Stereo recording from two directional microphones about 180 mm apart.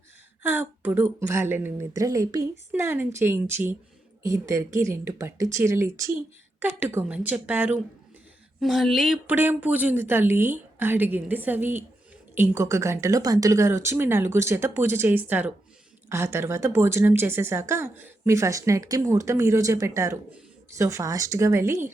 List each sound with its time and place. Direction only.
0.4 s speech: 10° right (ahead or behind)